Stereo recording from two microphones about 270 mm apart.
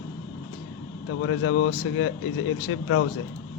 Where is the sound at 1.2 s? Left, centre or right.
Left.